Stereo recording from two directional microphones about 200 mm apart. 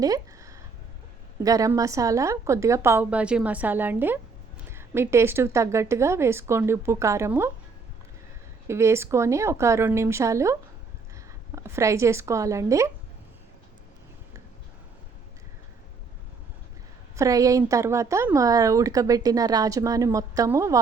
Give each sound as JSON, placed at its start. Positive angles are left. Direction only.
{"t": 0.0, "sound": "a sound", "side_deg": -15}
{"t": 1.5, "sound": "speech", "side_deg": -15}
{"t": 8.6, "sound": "speech", "side_deg": -15}
{"t": 17.2, "sound": "speech", "side_deg": -15}